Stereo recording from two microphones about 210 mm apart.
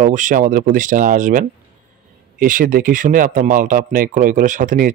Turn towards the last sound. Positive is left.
turn(degrees=-40)  # may be behind; listen again after turning